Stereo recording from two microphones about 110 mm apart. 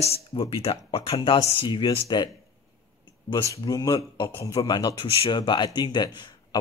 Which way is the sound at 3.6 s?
30° left (ahead or behind).